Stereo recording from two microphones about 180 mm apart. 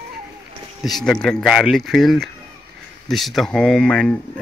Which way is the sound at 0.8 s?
Centre (ahead or behind).